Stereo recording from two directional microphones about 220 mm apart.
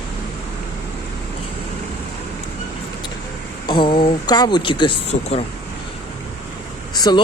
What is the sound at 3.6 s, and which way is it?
Speech, 20° left (ahead or behind).